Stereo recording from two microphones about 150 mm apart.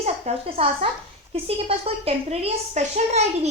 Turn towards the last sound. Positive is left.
turn(degrees=-50)  # may be behind; listen again after turning